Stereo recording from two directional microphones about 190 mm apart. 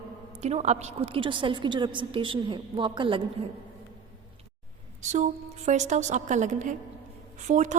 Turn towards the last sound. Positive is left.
turn(degrees=-40)  # may be behind; listen again after turning